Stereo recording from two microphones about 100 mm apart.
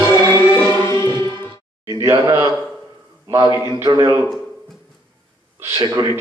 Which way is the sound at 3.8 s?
45° right (ahead or behind).